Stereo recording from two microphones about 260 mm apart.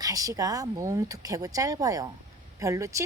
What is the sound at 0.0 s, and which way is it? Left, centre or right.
Speech, centre.